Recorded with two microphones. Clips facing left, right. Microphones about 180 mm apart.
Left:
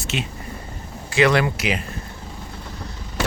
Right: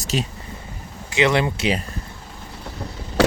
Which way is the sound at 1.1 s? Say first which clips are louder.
Left 1 dB; 20° right (ahead or behind).